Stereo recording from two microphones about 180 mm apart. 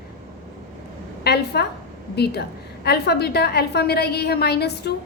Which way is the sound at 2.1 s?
65° left (ahead or behind).